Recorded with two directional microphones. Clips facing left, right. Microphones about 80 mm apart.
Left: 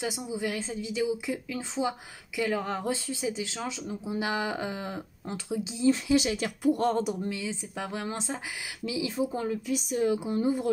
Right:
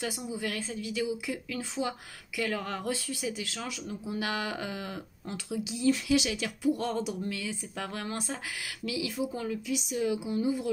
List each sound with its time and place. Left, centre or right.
0.0 s speech: centre; by 7.2 s left
7.2 s speech: left